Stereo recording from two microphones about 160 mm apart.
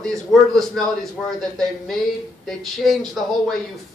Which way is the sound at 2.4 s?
Centre (ahead or behind).